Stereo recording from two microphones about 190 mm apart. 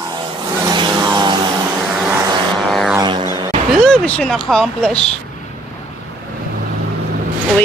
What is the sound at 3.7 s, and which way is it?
Speech, 5° left (ahead or behind).